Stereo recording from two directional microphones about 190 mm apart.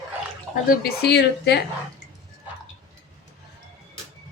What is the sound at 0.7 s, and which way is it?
Speech, 55° left (ahead or behind).